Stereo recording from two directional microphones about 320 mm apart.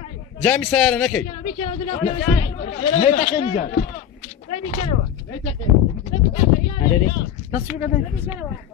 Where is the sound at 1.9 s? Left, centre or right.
Left.